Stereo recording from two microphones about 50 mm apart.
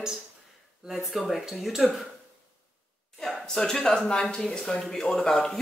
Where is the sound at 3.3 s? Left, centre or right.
Centre.